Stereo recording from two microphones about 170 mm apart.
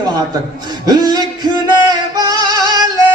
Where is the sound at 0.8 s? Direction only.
25° right (ahead or behind).